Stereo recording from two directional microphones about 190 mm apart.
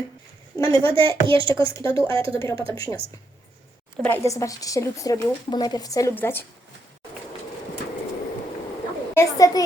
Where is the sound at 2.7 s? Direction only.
15° left (ahead or behind).